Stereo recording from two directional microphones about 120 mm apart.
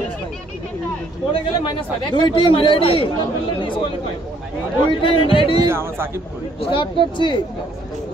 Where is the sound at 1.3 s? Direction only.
40° left (ahead or behind).